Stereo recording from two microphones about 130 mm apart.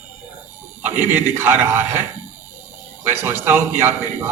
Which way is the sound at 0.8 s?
15° right (ahead or behind).